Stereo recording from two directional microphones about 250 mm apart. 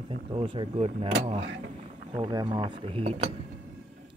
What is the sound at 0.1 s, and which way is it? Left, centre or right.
Speech, right.